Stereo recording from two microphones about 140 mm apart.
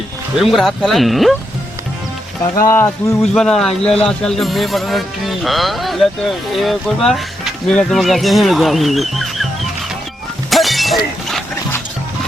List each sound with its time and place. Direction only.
0.3 s speech: centre (ahead or behind)
2.6 s speech: 20° left (ahead or behind)
3.3 s speech: 5° left (ahead or behind)
10.5 s shatter: centre (ahead or behind)